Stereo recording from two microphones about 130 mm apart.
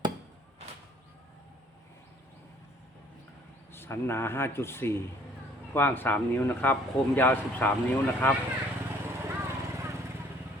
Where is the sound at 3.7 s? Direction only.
20° left (ahead or behind).